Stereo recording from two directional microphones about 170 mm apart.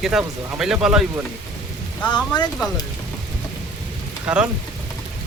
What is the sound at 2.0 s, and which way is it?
Speech, 25° left (ahead or behind).